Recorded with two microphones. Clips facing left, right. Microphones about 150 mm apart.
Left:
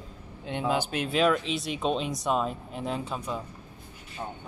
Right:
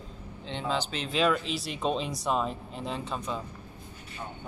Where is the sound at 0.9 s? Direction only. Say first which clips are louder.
Left 1 dB; 5° left (ahead or behind).